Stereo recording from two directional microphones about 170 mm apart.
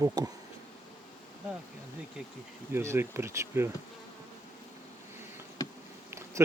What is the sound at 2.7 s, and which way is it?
Speech, 15° right (ahead or behind).